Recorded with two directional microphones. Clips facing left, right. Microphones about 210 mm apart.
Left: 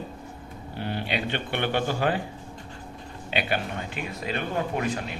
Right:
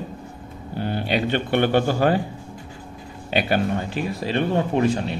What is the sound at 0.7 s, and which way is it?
A man's voice, 45° right (ahead or behind).